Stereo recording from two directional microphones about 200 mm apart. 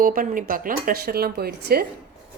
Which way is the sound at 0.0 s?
45° right (ahead or behind).